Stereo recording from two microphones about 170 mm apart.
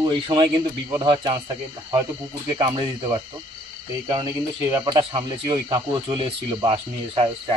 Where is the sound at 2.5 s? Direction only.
25° right (ahead or behind).